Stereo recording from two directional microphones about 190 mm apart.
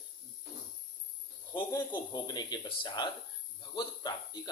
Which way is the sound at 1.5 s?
20° left (ahead or behind).